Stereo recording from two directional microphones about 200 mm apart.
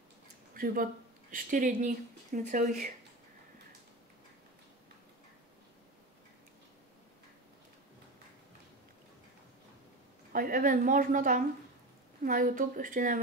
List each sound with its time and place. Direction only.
0.6 s speech: 45° right (ahead or behind)
10.3 s a woman's voice: 45° right (ahead or behind)